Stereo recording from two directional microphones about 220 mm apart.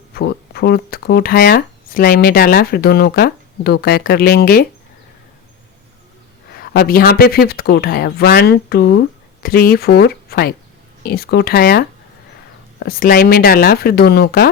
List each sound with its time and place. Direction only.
0.1 s speech: 45° left (ahead or behind)
6.5 s speech: 45° left (ahead or behind)